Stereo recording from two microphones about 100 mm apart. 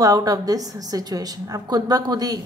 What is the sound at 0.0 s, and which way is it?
A woman's voice, 40° right (ahead or behind).